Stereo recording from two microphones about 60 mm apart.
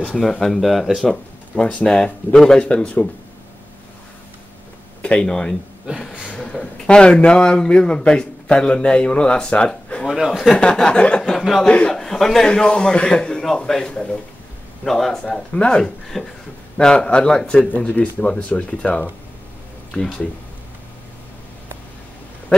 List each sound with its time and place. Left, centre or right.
0.2 s speech: centre
1.0 s a man's voice: centre
5.0 s a man's voice: centre
10.0 s speech: centre
10.5 s a man's voice: centre
11.2 s speech: centre
11.6 s a man's voice: centre
11.9 s a man's voice: centre
15.2 s speech: centre
15.8 s a man's voice: centre
17.6 s speech: left